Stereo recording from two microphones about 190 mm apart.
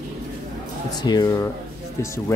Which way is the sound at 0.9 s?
20° left (ahead or behind).